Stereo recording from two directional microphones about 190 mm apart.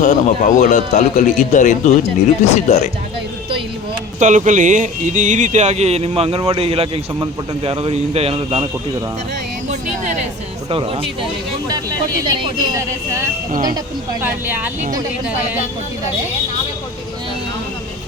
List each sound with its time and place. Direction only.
0.0 s speech: 40° left (ahead or behind)
4.2 s speech: 40° right (ahead or behind)
10.7 s speech: 30° right (ahead or behind)
13.5 s speech: 45° right (ahead or behind)
13.7 s speech: 10° right (ahead or behind)